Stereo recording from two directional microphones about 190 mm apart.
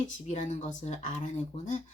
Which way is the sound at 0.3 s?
40° left (ahead or behind).